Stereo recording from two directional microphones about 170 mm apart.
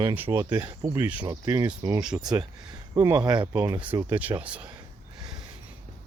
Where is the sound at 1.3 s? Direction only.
20° right (ahead or behind).